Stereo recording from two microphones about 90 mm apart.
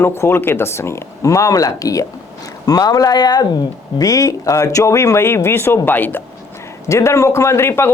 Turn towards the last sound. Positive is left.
turn(degrees=30)  # may be behind; listen again after turning